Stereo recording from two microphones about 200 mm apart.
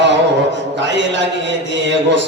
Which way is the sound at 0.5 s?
65° right (ahead or behind).